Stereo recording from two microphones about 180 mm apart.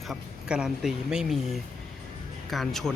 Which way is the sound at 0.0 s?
5° right (ahead or behind).